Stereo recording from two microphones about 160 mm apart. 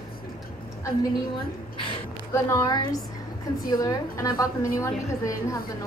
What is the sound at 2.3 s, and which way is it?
A woman's voice, 20° left (ahead or behind).